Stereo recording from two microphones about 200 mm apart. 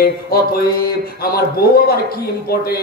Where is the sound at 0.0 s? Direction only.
50° left (ahead or behind).